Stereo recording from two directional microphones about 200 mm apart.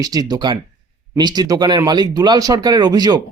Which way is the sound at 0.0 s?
20° right (ahead or behind).